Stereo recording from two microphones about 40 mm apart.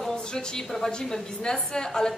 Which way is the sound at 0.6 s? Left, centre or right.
Centre.